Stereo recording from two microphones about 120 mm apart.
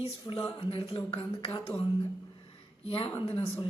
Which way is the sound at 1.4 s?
40° left (ahead or behind).